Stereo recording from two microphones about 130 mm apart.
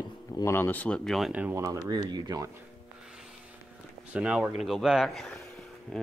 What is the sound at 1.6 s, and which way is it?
Speech, 25° right (ahead or behind).